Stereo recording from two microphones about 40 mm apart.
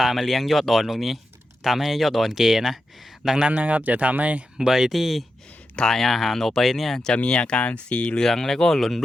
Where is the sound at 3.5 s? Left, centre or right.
Right.